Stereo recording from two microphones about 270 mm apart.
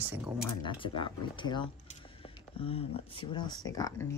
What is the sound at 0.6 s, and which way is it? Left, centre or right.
Speech, centre.